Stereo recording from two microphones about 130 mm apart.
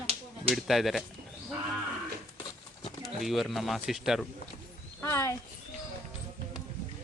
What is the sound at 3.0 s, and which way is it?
Speech, centre (ahead or behind).